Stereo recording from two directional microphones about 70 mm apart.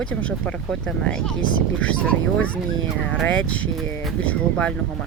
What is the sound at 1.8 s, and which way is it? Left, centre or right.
Speech, centre.